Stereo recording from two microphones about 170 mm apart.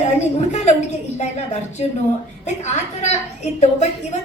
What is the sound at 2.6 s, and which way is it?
Speech, 40° left (ahead or behind).